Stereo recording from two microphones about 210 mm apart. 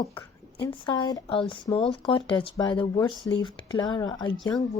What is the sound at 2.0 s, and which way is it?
Speech, 25° left (ahead or behind).